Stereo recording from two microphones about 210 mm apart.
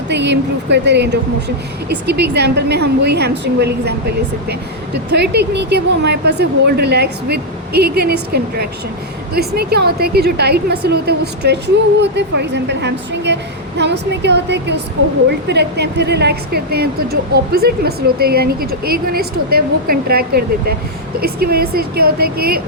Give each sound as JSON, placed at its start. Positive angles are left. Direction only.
{"t": 0.1, "sound": "a woman's voice", "side_deg": -55}
{"t": 5.1, "sound": "a woman's voice", "side_deg": -55}